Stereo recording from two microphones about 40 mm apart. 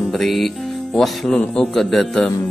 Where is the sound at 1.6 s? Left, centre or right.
Centre.